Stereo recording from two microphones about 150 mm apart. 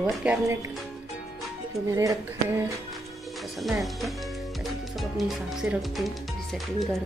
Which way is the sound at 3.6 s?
Centre (ahead or behind).